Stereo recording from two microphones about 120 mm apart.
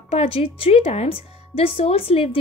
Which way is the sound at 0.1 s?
55° left (ahead or behind).